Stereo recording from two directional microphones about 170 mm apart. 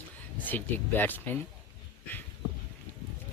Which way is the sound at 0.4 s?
10° left (ahead or behind).